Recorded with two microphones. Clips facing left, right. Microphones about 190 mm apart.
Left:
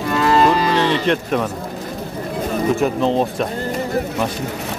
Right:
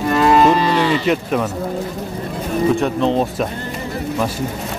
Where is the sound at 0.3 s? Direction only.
10° right (ahead or behind).